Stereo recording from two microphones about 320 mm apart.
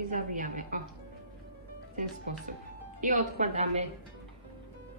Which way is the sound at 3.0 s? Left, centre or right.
Right.